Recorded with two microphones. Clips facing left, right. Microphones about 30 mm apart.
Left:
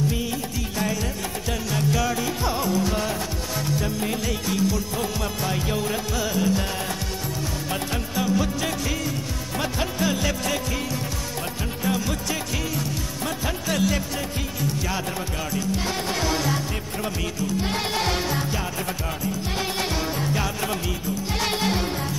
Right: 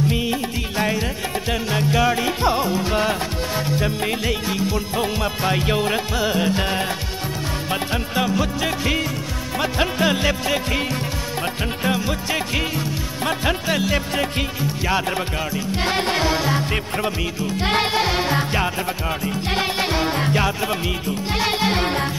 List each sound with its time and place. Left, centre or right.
0.1 s music: right
11.8 s music: right
13.7 s music: right
17.6 s music: right
17.8 s music: right
21.7 s music: right